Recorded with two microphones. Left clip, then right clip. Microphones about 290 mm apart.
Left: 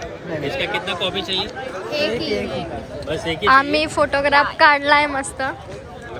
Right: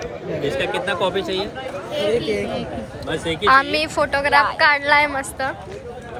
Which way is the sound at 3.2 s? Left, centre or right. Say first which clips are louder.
Even; centre.